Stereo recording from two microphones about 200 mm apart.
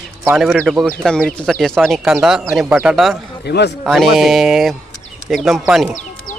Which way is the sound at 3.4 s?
55° left (ahead or behind).